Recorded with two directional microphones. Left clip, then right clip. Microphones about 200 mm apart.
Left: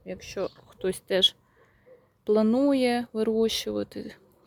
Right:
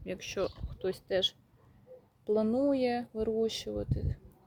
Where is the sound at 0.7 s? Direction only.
40° left (ahead or behind).